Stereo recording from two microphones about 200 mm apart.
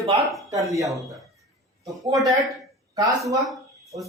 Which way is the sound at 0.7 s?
15° right (ahead or behind).